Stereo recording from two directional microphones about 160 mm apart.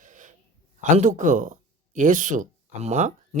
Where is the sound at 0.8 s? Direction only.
50° right (ahead or behind).